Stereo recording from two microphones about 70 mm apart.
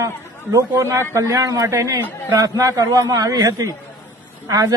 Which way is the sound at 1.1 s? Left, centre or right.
Right.